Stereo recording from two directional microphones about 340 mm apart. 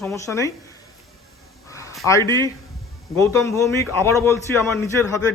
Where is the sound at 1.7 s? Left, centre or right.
Centre.